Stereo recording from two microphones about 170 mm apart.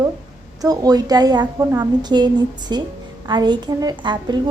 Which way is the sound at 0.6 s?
20° right (ahead or behind).